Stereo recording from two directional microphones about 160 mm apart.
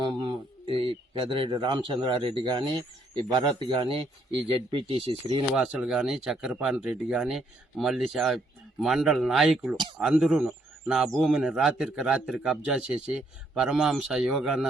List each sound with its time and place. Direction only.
0.0 s a sound: 30° right (ahead or behind)
3.3 s speech: 35° right (ahead or behind)
5.5 s a man's voice: 5° right (ahead or behind)